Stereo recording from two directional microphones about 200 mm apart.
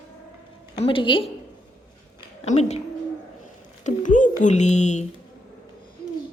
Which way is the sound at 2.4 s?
35° left (ahead or behind).